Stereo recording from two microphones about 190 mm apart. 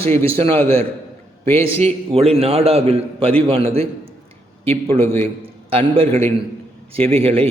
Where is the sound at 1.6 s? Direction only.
30° right (ahead or behind).